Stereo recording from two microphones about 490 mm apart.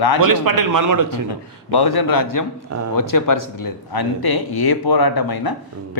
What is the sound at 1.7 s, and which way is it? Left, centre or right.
Speech, left.